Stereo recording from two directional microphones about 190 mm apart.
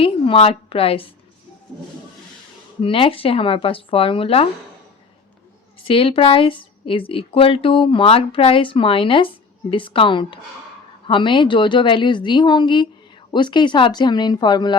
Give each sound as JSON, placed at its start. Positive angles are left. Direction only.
{"t": 0.0, "sound": "a woman's voice", "side_deg": 30}
{"t": 2.8, "sound": "speech", "side_deg": 30}
{"t": 5.9, "sound": "speech", "side_deg": 30}